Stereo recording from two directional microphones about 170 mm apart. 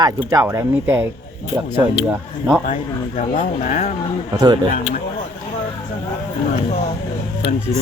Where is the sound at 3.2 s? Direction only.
50° left (ahead or behind).